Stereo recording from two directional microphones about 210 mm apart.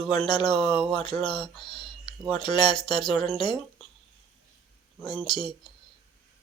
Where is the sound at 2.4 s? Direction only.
20° left (ahead or behind).